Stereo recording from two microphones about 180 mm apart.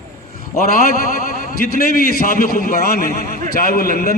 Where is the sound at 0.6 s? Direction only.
50° left (ahead or behind).